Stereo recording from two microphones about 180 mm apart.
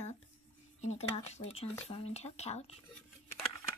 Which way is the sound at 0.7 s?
40° left (ahead or behind).